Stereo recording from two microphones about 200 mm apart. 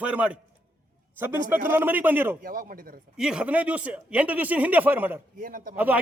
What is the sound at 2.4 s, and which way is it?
Speech, 45° right (ahead or behind).